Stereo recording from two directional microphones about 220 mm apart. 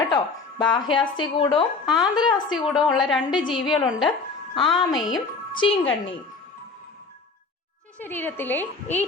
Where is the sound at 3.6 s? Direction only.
Centre (ahead or behind).